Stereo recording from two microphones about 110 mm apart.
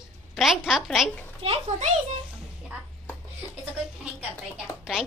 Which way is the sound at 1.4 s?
65° right (ahead or behind).